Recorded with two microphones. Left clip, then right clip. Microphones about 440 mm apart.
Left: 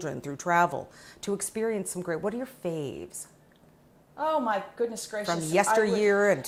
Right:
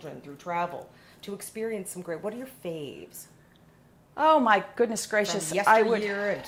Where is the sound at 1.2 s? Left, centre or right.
Left.